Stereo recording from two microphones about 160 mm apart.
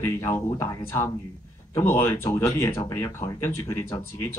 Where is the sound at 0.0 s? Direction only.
15° left (ahead or behind).